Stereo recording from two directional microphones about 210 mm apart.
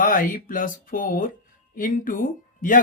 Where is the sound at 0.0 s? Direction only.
40° left (ahead or behind).